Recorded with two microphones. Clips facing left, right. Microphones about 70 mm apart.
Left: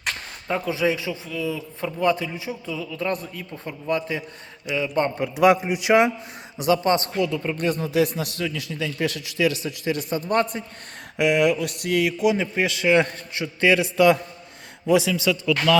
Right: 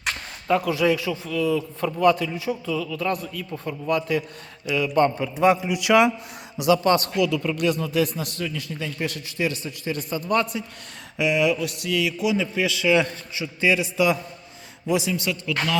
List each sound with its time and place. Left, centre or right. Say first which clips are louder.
0.4 s speech: right 3 dB; centre
3.1 s a man's voice: right 1 dB; left
5.5 s speech: even; left
7.9 s a man's voice: left 2 dB; left
10.1 s a man's voice: even; left
11.2 s speech: left 2 dB; left
14.8 s a man's voice: left 4 dB; left